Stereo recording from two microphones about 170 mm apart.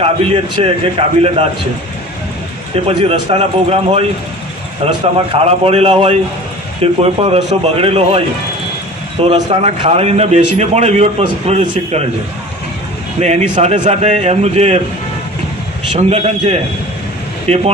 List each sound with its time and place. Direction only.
0.0 s a man's voice: 35° right (ahead or behind)
2.7 s a man's voice: 35° right (ahead or behind)
9.2 s a man's voice: 30° right (ahead or behind)
13.1 s a man's voice: 40° right (ahead or behind)
16.0 s a man's voice: 35° right (ahead or behind)
17.5 s speech: 5° left (ahead or behind)